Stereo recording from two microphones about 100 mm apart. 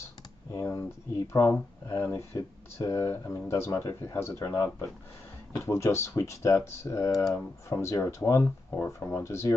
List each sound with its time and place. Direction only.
0.5 s speech: 30° left (ahead or behind)